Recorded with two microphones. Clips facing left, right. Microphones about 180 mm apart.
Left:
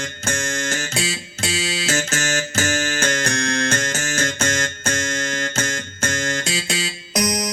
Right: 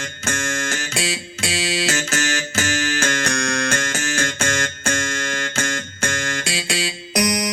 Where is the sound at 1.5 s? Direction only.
45° left (ahead or behind).